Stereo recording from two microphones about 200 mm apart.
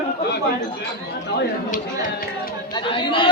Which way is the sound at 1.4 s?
40° left (ahead or behind).